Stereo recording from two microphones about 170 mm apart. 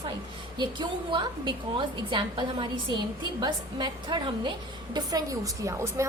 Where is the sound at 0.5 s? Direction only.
25° right (ahead or behind).